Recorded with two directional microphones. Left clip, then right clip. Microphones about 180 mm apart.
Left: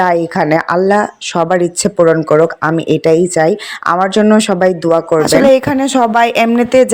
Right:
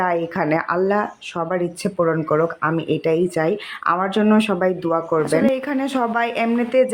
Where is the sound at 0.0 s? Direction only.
35° left (ahead or behind).